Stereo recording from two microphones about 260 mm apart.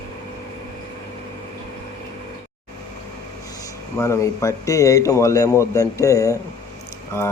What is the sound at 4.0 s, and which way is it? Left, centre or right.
A man's voice, centre.